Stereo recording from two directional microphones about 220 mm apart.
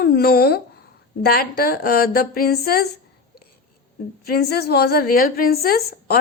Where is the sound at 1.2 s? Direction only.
45° left (ahead or behind).